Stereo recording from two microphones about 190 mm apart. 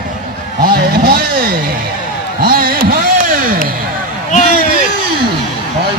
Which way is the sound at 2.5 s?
50° right (ahead or behind).